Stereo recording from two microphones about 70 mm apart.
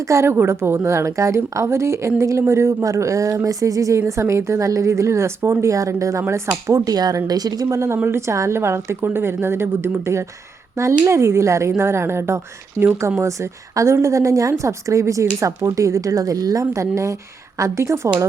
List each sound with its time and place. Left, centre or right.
0.0 s a woman's voice: right
8.0 s a woman's voice: right